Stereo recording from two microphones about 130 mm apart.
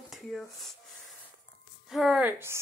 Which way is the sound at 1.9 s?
Centre (ahead or behind).